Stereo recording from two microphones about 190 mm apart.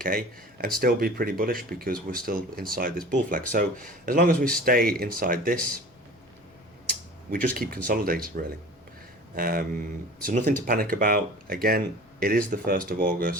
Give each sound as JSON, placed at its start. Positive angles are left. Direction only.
{"t": 0.0, "sound": "speech", "side_deg": -50}
{"t": 4.4, "sound": "speech", "side_deg": 5}
{"t": 4.6, "sound": "speech", "side_deg": -50}
{"t": 7.5, "sound": "speech", "side_deg": -50}